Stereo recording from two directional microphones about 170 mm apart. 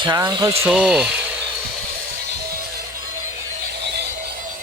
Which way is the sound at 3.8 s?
75° right (ahead or behind).